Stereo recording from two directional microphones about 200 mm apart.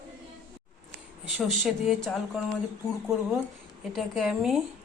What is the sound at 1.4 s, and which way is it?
Speech, centre (ahead or behind).